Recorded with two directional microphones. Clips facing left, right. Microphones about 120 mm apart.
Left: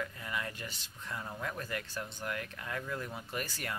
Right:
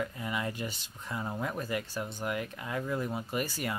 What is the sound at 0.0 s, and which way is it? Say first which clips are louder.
Speech: right 5 dB; 20° right (ahead or behind).